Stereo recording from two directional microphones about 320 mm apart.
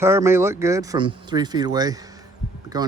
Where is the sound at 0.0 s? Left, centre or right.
Centre.